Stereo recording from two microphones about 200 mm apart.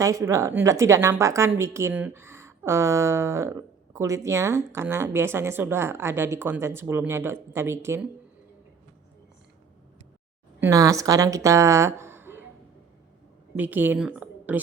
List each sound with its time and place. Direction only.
0.0 s speech: 15° right (ahead or behind)
10.6 s a woman's voice: 15° right (ahead or behind)
13.6 s a woman's voice: 10° right (ahead or behind)